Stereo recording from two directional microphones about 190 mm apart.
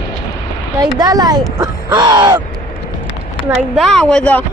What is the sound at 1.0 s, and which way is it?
Speech, 20° right (ahead or behind).